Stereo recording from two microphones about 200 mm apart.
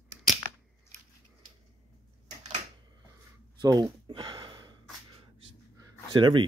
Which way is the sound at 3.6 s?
20° right (ahead or behind).